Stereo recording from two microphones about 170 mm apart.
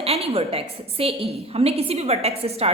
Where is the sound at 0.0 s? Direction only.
35° right (ahead or behind).